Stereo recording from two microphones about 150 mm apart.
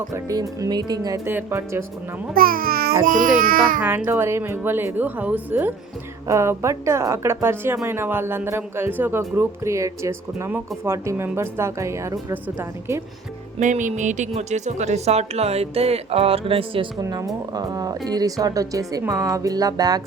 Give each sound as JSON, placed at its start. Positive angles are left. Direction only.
{"t": 0.1, "sound": "a woman's voice", "side_deg": -25}
{"t": 2.3, "sound": "speech", "side_deg": -75}
{"t": 3.8, "sound": "a woman's voice", "side_deg": -15}
{"t": 13.6, "sound": "a woman's voice", "side_deg": -55}
{"t": 17.0, "sound": "a woman's voice", "side_deg": -20}